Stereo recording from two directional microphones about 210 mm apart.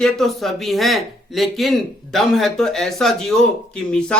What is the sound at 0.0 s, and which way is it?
Speech, centre (ahead or behind).